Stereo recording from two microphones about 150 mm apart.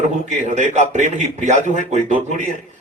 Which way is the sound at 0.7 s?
50° right (ahead or behind).